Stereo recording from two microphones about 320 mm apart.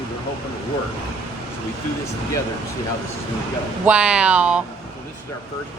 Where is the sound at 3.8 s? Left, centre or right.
Centre.